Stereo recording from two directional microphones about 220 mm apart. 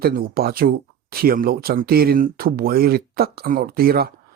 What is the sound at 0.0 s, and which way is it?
Speech, 45° right (ahead or behind).